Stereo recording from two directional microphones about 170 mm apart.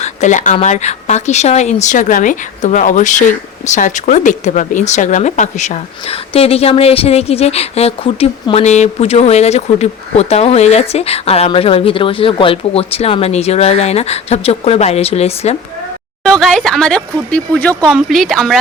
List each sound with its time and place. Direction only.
0.0 s speech: 45° left (ahead or behind)
16.2 s speech: 5° left (ahead or behind)